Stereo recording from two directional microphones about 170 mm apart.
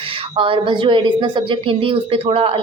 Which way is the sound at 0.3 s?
30° right (ahead or behind).